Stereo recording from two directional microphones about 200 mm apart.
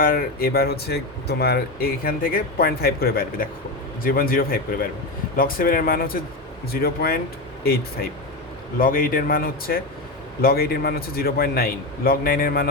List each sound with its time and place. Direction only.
0.0 s speech: 45° left (ahead or behind)